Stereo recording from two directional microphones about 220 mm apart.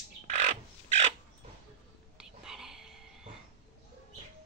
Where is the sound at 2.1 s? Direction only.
Centre (ahead or behind).